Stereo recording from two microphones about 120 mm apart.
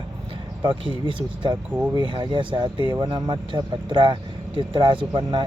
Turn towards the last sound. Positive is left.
turn(degrees=-45)  # may be behind; listen again after turning